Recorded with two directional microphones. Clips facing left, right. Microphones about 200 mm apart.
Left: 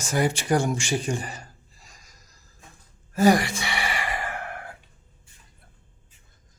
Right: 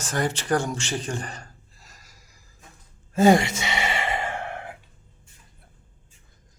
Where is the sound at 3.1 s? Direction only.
25° right (ahead or behind).